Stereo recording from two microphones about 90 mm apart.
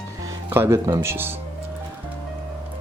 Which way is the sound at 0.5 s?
30° right (ahead or behind).